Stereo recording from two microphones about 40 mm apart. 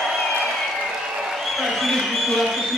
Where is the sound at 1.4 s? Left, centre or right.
Centre.